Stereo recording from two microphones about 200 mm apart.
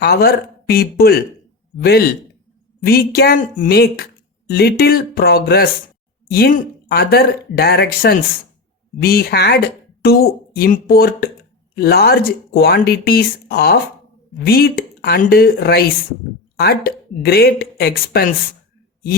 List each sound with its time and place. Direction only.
0.0 s speech: 50° left (ahead or behind)